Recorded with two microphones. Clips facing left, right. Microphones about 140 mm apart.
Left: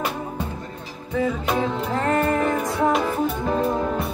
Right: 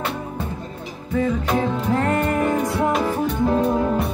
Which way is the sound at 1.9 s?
15° right (ahead or behind).